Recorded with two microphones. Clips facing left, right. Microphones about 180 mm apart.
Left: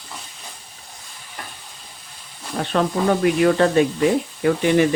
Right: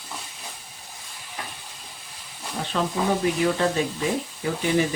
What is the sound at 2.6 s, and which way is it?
Speech, 65° left (ahead or behind).